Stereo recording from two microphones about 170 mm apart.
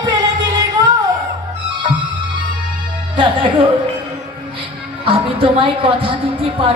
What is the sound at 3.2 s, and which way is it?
Music, 30° right (ahead or behind).